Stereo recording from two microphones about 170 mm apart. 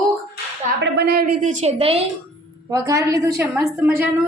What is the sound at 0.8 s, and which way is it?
A woman's voice, 70° right (ahead or behind).